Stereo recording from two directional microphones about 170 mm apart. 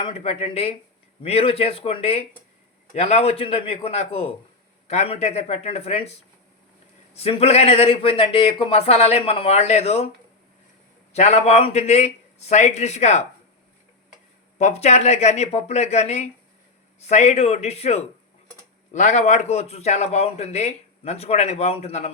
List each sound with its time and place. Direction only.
0.0 s speech: 35° left (ahead or behind)
11.1 s speech: 40° left (ahead or behind)
14.6 s speech: 40° left (ahead or behind)